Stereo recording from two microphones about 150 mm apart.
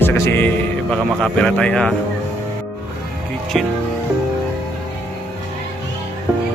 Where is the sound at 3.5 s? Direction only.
Centre (ahead or behind).